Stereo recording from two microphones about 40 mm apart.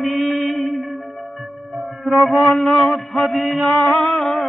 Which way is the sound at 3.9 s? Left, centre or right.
Centre.